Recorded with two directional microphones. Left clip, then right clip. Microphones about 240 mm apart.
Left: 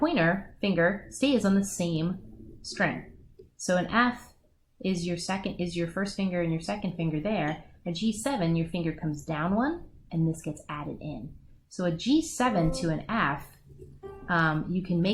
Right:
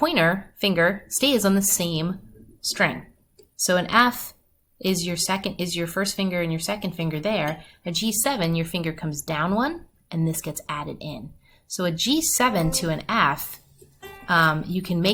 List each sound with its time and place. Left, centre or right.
0.0 s speech: centre